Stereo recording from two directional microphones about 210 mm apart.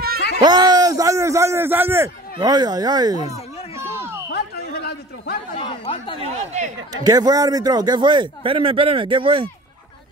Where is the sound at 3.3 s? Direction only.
30° left (ahead or behind).